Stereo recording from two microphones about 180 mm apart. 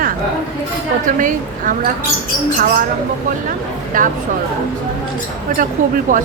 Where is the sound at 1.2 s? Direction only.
50° right (ahead or behind).